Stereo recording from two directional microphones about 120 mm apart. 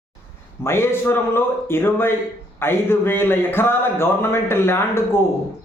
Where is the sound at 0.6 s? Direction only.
20° left (ahead or behind).